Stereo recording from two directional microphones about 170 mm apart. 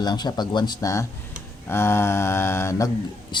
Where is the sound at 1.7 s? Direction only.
15° left (ahead or behind).